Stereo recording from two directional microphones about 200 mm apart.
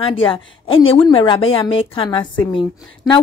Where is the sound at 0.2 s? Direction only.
25° left (ahead or behind).